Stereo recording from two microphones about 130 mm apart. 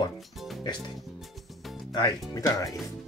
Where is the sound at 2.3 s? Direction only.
25° left (ahead or behind).